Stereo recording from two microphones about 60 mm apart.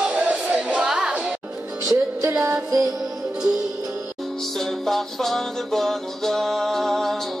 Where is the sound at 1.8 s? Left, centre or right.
Right.